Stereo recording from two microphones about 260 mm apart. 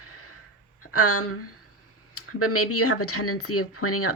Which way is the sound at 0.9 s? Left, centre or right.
Left.